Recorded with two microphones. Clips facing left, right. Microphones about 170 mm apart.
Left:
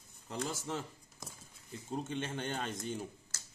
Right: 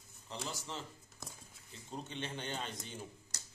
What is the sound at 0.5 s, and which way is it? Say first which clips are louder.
Speech: left 3 dB; 55° left (ahead or behind).